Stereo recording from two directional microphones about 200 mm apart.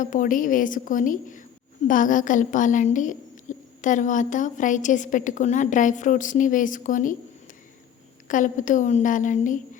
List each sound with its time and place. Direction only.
0.0 s a woman's voice: 40° left (ahead or behind)
8.3 s a woman's voice: 40° left (ahead or behind)